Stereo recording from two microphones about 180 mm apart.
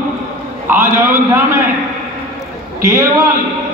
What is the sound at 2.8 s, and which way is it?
Speech, 15° right (ahead or behind).